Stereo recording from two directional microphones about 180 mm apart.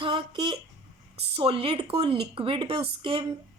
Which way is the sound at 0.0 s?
30° right (ahead or behind).